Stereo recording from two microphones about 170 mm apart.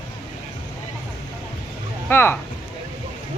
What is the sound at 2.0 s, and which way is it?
Speech, 10° left (ahead or behind).